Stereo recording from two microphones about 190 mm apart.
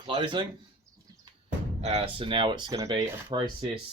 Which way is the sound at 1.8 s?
35° right (ahead or behind).